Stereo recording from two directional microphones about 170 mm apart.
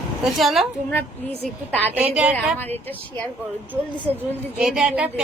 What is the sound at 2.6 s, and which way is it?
Speech, 10° left (ahead or behind).